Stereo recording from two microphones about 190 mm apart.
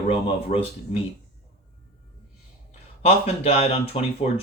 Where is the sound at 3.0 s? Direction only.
30° left (ahead or behind).